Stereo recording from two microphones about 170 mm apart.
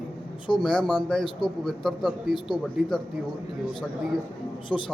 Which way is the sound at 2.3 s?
25° left (ahead or behind).